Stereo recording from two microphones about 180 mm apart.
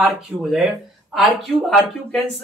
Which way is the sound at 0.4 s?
Centre (ahead or behind).